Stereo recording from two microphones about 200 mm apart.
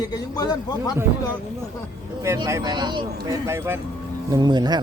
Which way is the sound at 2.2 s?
15° right (ahead or behind).